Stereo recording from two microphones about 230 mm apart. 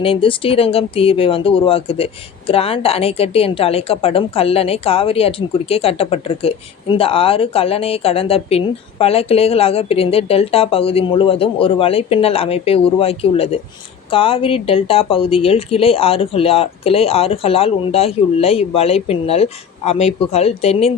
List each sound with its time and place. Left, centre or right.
0.0 s a woman's voice: left